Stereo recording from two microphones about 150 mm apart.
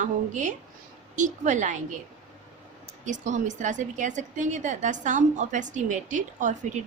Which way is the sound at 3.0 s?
55° right (ahead or behind).